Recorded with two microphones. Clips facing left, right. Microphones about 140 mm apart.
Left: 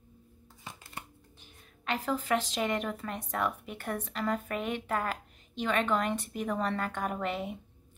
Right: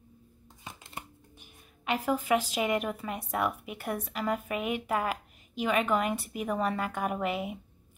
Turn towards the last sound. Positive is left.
turn(degrees=-5)  # may be behind; listen again after turning